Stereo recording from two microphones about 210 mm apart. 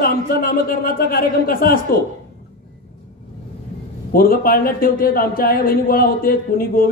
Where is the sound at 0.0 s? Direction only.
45° left (ahead or behind).